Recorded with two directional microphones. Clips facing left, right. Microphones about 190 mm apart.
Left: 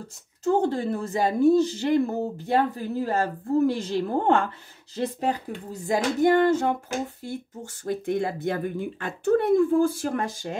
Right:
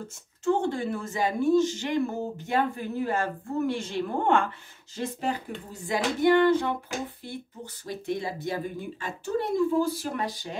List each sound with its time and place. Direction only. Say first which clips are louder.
0.4 s a woman's voice: left 3 dB; 35° left (ahead or behind)